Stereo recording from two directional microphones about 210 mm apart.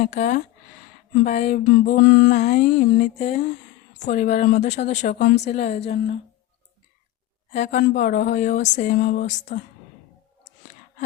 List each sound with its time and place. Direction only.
0.2 s speech: 40° left (ahead or behind)
1.2 s a sound: 35° left (ahead or behind)
2.5 s speech: 35° left (ahead or behind)
5.5 s a woman's voice: 30° left (ahead or behind)
7.5 s speech: 35° left (ahead or behind)